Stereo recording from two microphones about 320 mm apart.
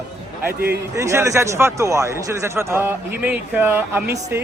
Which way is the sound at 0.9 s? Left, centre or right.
Centre.